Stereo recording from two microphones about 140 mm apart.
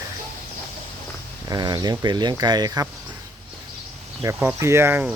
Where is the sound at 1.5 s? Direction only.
30° right (ahead or behind).